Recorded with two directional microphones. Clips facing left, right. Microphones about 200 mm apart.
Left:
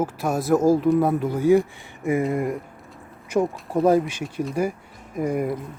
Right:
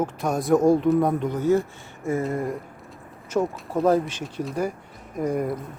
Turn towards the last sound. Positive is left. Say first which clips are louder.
# left 1 dB
turn(degrees=10)  # may be behind; listen again after turning